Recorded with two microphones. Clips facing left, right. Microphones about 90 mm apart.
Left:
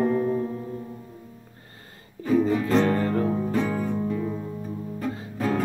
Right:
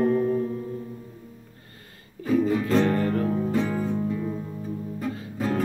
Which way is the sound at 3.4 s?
Centre (ahead or behind).